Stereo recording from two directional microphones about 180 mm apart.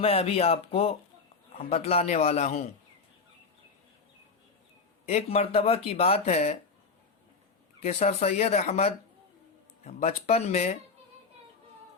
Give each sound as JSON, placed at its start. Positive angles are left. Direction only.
{"t": 0.0, "sound": "speech", "side_deg": 30}
{"t": 5.0, "sound": "speech", "side_deg": 35}
{"t": 7.9, "sound": "speech", "side_deg": 35}